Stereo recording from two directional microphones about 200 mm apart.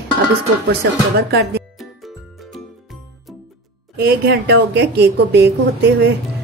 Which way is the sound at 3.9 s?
50° right (ahead or behind).